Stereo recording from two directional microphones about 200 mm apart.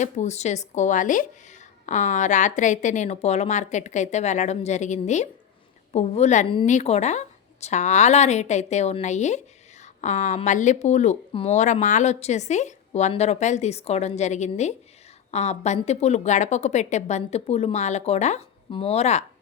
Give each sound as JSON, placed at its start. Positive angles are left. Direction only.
{"t": 0.0, "sound": "speech", "side_deg": 35}